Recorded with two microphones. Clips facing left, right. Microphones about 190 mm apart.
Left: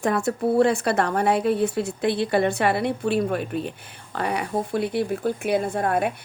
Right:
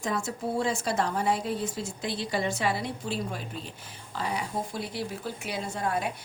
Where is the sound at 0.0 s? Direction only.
60° left (ahead or behind).